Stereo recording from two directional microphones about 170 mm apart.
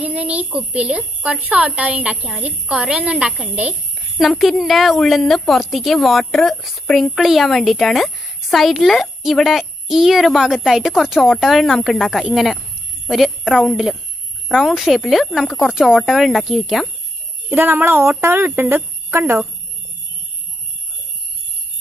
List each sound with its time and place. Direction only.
0.0 s a child's voice: 5° right (ahead or behind)
17.5 s a child's voice: 10° right (ahead or behind)